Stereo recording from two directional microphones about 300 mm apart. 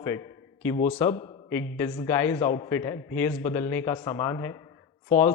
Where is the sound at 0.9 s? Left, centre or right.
Centre.